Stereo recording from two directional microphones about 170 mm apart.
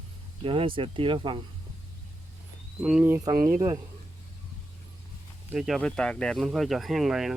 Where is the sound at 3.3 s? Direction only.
55° right (ahead or behind).